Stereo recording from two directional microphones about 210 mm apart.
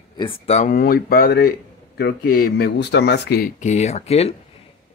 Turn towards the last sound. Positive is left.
turn(degrees=30)  # may be behind; listen again after turning